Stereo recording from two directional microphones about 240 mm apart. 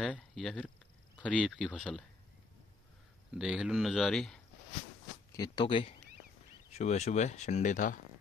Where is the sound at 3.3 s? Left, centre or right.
Centre.